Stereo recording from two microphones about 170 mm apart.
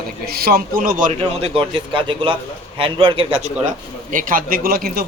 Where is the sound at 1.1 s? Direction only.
35° right (ahead or behind).